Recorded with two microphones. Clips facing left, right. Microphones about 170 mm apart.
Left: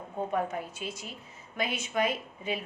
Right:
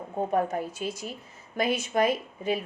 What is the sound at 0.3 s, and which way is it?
Speech, 40° right (ahead or behind).